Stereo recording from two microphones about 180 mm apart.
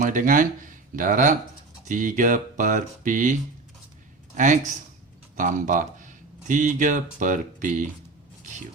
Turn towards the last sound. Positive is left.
turn(degrees=-45)  # may be behind; listen again after turning